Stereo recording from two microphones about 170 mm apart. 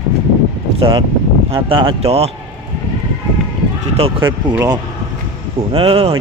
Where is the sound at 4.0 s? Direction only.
30° right (ahead or behind).